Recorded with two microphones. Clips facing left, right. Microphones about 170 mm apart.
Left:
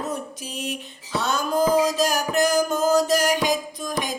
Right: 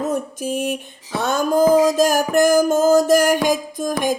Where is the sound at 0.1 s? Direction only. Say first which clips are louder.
Right 9 dB; 50° right (ahead or behind).